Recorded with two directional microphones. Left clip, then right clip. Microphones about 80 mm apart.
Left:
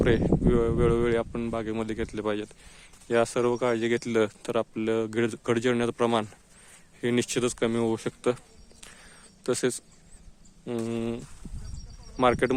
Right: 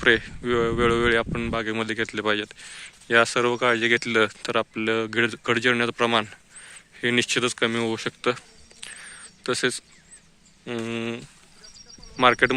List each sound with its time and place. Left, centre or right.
0.0 s speech: left
7.9 s a sound: left
9.4 s speech: left